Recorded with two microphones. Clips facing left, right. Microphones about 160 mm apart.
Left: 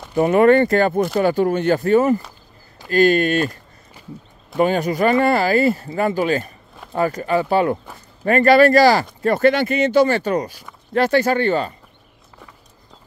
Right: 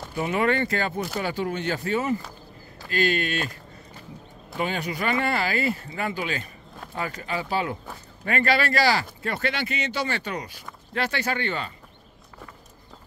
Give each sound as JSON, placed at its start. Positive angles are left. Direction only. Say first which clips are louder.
{"t": 0.1, "sound": "speech", "louder": "left 11 dB", "side_deg": 50}
{"t": 4.6, "sound": "speech", "louder": "left 11 dB", "side_deg": 45}